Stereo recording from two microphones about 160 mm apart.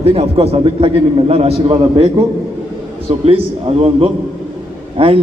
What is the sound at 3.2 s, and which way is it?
A man's voice, 35° right (ahead or behind).